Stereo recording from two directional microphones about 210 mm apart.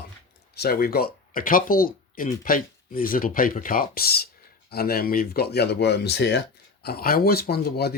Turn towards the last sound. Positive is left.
turn(degrees=50)  # may be behind; listen again after turning